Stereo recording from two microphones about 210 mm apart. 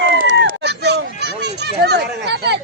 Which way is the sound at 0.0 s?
60° right (ahead or behind).